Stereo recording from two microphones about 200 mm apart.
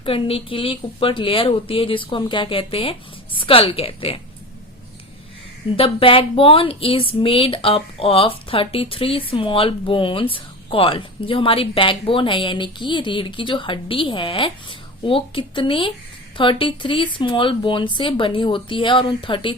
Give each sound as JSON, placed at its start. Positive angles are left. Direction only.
{"t": 0.0, "sound": "speech", "side_deg": 25}
{"t": 5.7, "sound": "speech", "side_deg": 30}